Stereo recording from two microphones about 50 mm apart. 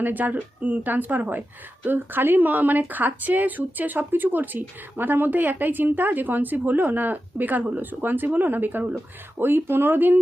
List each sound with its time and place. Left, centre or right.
0.0 s a woman's voice: right
9.4 s speech: right